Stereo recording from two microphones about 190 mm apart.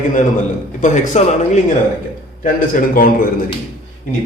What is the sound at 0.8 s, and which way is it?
A man's voice, 40° left (ahead or behind).